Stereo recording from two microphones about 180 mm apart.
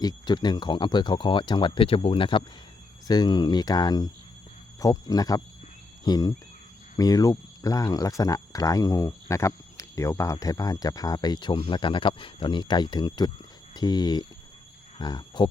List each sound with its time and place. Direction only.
0.0 s speech: 20° left (ahead or behind)